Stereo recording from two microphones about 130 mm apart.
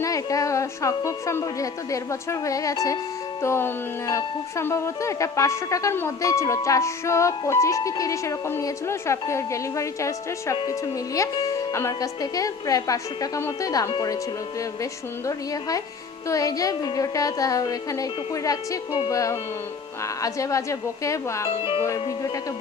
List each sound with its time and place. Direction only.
0.0 s speech: 25° left (ahead or behind)
16.3 s speech: 25° left (ahead or behind)
21.5 s speech: 40° left (ahead or behind)